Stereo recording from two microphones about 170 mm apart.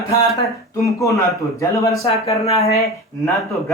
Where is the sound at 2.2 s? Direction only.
35° left (ahead or behind).